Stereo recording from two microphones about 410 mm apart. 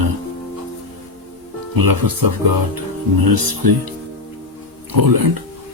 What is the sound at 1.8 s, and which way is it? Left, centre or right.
Speech, right.